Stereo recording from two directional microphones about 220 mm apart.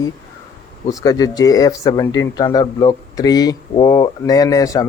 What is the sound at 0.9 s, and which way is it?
Speech, 15° left (ahead or behind).